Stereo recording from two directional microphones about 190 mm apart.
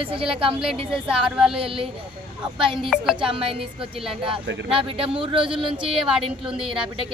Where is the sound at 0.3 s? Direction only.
30° right (ahead or behind).